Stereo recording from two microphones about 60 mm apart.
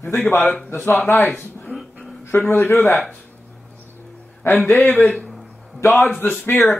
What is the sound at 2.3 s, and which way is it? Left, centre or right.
Speech, left.